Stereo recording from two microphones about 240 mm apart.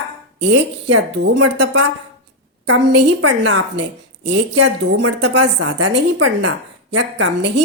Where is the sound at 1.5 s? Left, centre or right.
Right.